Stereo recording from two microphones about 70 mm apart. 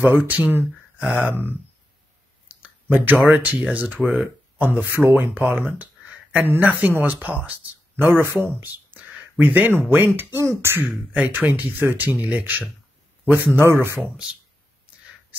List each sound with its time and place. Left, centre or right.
0.0 s speech: right
2.6 s a sound: centre
3.3 s speech: right
8.5 s speech: right
11.1 s a man's voice: right
13.6 s speech: right